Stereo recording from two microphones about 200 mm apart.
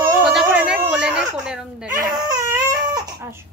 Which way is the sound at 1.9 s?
20° right (ahead or behind).